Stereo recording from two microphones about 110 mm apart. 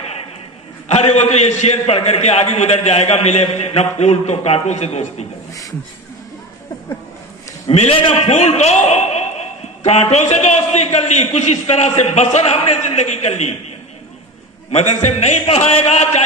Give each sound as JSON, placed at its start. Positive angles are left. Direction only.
{"t": 0.8, "sound": "a man's voice", "side_deg": 80}
{"t": 5.5, "sound": "speech", "side_deg": 30}
{"t": 7.7, "sound": "a man's voice", "side_deg": 75}
{"t": 8.0, "sound": "a man's voice", "side_deg": 65}
{"t": 14.7, "sound": "a man's voice", "side_deg": 90}